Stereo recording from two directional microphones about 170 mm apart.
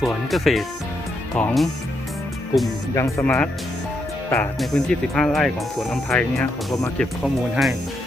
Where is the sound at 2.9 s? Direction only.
15° left (ahead or behind).